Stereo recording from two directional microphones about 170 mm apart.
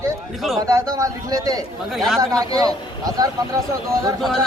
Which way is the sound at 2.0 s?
Centre (ahead or behind).